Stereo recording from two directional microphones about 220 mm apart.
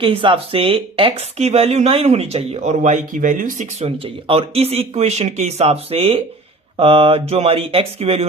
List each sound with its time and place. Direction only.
0.0 s speech: 25° right (ahead or behind)